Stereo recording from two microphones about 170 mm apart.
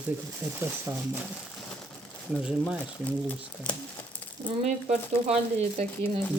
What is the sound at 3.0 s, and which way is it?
Speech, 10° left (ahead or behind).